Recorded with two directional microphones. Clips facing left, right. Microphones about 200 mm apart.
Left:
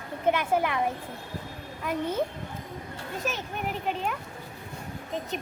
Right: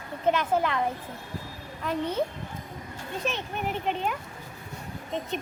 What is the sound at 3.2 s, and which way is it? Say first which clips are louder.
Speech: right 2 dB; centre (ahead or behind).